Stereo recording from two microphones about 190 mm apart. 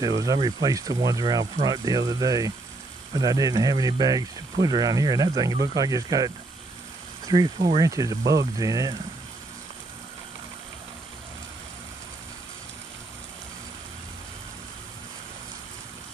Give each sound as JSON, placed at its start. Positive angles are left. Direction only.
{"t": 0.0, "sound": "speech", "side_deg": -20}